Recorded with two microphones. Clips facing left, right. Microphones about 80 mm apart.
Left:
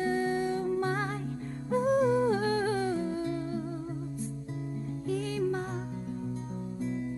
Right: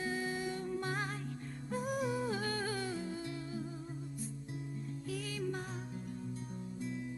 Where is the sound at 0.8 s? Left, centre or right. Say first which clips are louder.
Left 8 dB; centre.